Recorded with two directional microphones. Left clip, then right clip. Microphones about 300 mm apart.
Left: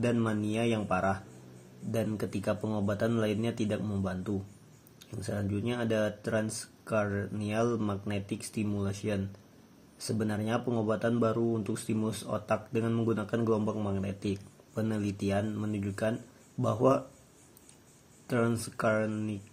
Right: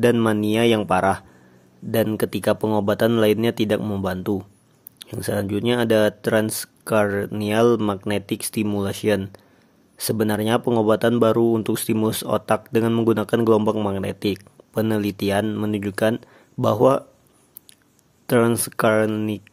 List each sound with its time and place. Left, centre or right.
0.0 s speech: right
18.3 s speech: right